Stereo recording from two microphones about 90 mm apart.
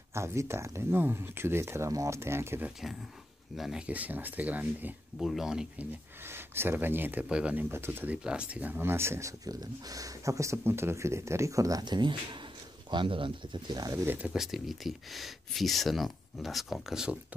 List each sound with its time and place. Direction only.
0.1 s speech: 30° right (ahead or behind)
2.8 s speech: 5° right (ahead or behind)
3.8 s speech: 15° right (ahead or behind)
5.2 s speech: 5° right (ahead or behind)
5.8 s speech: 25° right (ahead or behind)
7.7 s speech: 25° right (ahead or behind)
8.2 s speech: 10° right (ahead or behind); by 9.3 s 30° right (ahead or behind)
9.4 s speech: 45° right (ahead or behind)
11.8 s speech: 55° right (ahead or behind)
12.9 s speech: 75° right (ahead or behind)
14.0 s speech: 15° right (ahead or behind)
14.3 s speech: 5° right (ahead or behind)